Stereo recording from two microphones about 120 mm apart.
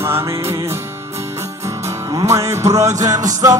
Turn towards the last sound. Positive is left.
turn(degrees=-30)  # may be behind; listen again after turning